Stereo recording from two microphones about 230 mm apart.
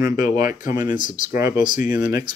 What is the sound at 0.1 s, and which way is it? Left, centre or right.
Speech, left.